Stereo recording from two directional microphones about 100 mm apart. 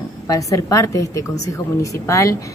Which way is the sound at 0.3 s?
35° left (ahead or behind).